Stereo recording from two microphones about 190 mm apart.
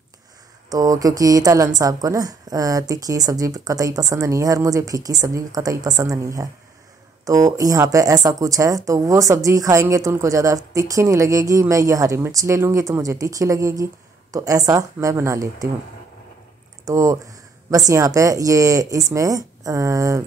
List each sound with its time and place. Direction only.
0.7 s a woman's voice: 15° right (ahead or behind)
7.5 s speech: 15° right (ahead or behind)
16.8 s speech: 15° right (ahead or behind)